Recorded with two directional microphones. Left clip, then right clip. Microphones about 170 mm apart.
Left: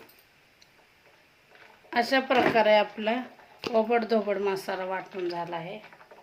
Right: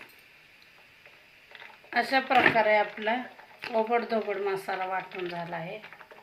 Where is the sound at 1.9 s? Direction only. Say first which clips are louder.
Even; 50° left (ahead or behind).